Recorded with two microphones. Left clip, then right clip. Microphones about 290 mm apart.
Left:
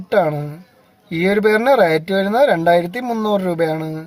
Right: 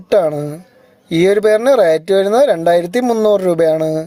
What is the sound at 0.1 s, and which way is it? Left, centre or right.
Speech, right.